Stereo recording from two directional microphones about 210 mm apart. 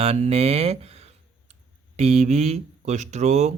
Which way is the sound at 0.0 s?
30° right (ahead or behind).